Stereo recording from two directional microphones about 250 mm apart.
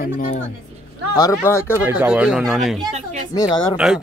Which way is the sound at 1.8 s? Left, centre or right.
Centre.